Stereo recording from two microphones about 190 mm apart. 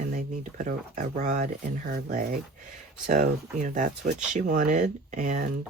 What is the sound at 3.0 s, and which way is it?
Speech, 45° right (ahead or behind).